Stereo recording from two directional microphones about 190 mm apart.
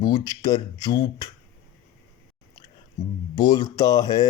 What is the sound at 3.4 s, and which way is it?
Speech, 20° left (ahead or behind).